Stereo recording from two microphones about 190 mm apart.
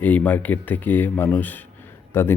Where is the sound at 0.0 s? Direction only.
10° left (ahead or behind).